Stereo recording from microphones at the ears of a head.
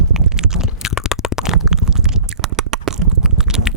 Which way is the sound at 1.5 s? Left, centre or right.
Right.